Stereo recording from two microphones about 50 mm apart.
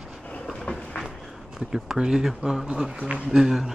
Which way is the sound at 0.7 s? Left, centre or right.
Left.